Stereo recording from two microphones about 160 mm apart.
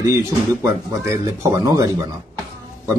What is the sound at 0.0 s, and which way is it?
Speech, 20° right (ahead or behind).